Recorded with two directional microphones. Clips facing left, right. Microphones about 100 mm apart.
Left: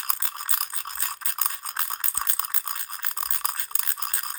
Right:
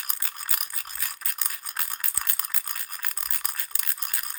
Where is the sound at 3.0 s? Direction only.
35° left (ahead or behind).